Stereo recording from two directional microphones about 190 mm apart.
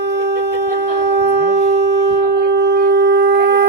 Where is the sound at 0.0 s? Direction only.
60° right (ahead or behind).